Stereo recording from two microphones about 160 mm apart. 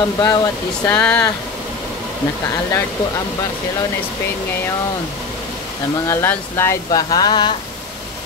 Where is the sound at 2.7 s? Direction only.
15° left (ahead or behind).